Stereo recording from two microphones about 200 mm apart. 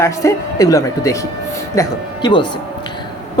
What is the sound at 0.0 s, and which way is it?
Speech, 15° left (ahead or behind).